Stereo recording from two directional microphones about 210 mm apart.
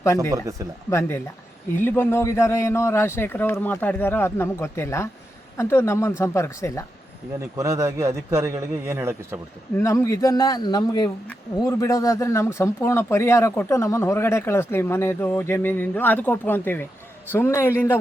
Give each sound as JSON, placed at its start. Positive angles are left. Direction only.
{"t": 0.2, "sound": "a man's voice", "side_deg": -15}
{"t": 0.9, "sound": "speech", "side_deg": 10}
{"t": 7.5, "sound": "a man's voice", "side_deg": -15}
{"t": 9.7, "sound": "speech", "side_deg": 15}